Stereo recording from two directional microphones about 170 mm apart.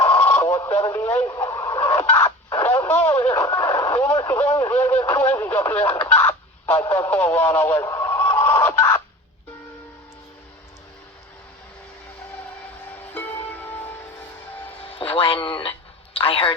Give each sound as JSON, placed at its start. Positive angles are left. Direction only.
{"t": 0.2, "sound": "radio", "side_deg": 10}
{"t": 0.8, "sound": "speech", "side_deg": 15}
{"t": 1.4, "sound": "radio", "side_deg": 15}
{"t": 6.7, "sound": "speech", "side_deg": 10}
{"t": 13.1, "sound": "music", "side_deg": 10}
{"t": 15.1, "sound": "music", "side_deg": 30}
{"t": 16.1, "sound": "a sound", "side_deg": 35}